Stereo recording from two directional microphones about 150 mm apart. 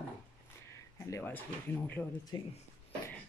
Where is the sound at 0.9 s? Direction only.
15° left (ahead or behind).